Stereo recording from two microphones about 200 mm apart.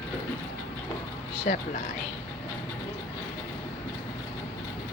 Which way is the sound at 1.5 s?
40° left (ahead or behind).